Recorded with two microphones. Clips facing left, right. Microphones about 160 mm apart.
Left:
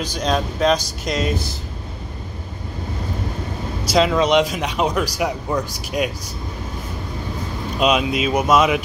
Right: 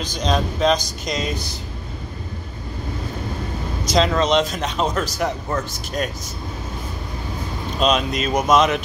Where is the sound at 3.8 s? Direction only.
10° left (ahead or behind).